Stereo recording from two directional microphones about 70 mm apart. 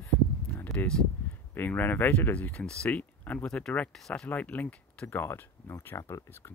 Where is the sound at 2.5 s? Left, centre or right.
Centre.